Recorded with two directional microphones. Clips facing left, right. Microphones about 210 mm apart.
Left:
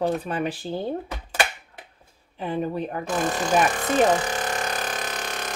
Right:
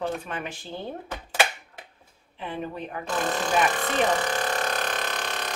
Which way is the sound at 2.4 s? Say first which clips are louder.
Left 6 dB; 40° left (ahead or behind).